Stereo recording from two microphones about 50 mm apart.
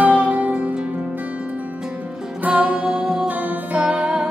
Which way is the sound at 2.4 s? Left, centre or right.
Right.